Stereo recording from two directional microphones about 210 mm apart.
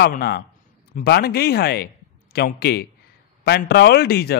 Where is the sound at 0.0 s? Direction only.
50° left (ahead or behind).